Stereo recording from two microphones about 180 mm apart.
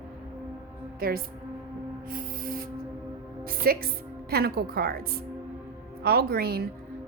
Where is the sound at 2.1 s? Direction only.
50° right (ahead or behind).